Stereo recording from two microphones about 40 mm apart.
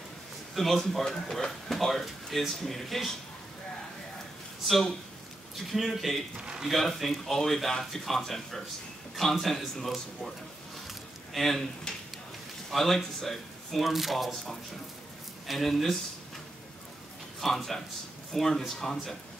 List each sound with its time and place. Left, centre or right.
0.6 s speech: centre
5.7 s speech: centre
6.3 s speech: right
6.7 s speech: centre
11.3 s speech: centre
12.7 s speech: centre
17.4 s speech: centre